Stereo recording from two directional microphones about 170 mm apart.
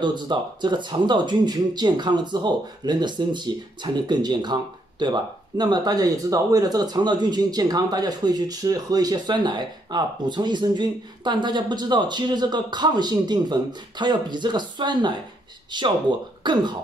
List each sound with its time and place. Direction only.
0.0 s speech: 25° right (ahead or behind)